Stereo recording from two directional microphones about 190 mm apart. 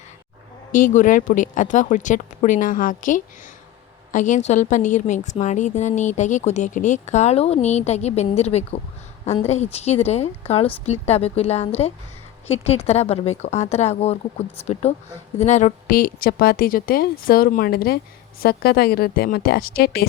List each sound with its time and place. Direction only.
0.7 s a woman's voice: 45° left (ahead or behind)